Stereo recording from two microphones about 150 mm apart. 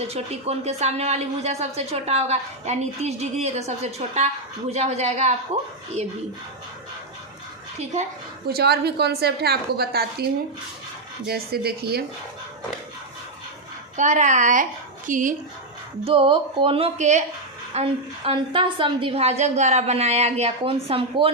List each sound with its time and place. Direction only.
0.1 s speech: 45° right (ahead or behind)
8.4 s a woman's voice: 90° right
11.3 s a woman's voice: 90° right
13.9 s a woman's voice: 55° right (ahead or behind)
16.0 s speech: 35° right (ahead or behind); by 17.2 s 50° right (ahead or behind)
17.7 s speech: 40° right (ahead or behind)